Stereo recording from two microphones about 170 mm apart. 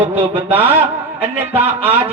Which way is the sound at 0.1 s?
10° right (ahead or behind).